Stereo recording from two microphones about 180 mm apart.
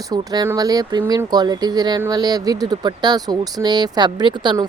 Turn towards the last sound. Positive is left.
turn(degrees=-25)  # may be behind; listen again after turning